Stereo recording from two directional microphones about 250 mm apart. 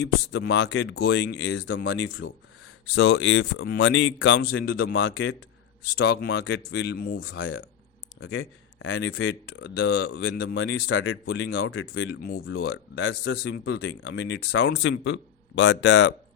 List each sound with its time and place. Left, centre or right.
0.0 s speech: left
8.2 s speech: left